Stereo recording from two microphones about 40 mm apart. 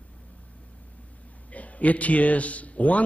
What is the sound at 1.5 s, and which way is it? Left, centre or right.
A man's voice, left.